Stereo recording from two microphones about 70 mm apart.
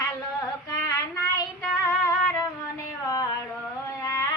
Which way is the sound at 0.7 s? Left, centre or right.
Left.